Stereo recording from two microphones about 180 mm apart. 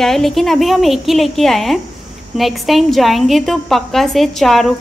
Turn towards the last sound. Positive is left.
turn(degrees=0)  # may be behind; listen again after turning